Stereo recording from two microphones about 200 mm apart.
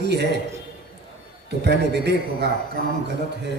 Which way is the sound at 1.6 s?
55° right (ahead or behind).